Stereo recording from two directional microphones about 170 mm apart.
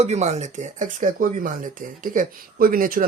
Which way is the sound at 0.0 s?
40° right (ahead or behind).